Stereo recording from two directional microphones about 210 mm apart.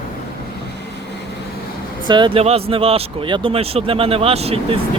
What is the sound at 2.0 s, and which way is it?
Speech, 20° right (ahead or behind).